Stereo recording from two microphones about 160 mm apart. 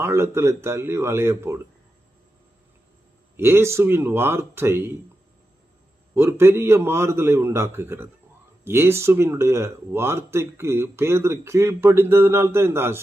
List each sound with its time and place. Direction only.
0.0 s speech: 15° right (ahead or behind)
3.3 s speech: 15° right (ahead or behind)
6.1 s speech: 15° right (ahead or behind)